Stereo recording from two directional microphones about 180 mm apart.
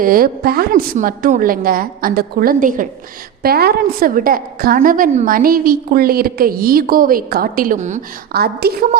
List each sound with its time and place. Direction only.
0.0 s a woman's voice: 55° right (ahead or behind)
3.4 s a woman's voice: 60° right (ahead or behind); by 8.0 s 40° right (ahead or behind)
8.3 s a woman's voice: 60° right (ahead or behind)